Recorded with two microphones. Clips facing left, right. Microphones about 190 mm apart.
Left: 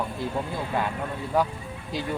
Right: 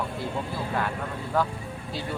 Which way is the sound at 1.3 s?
15° left (ahead or behind).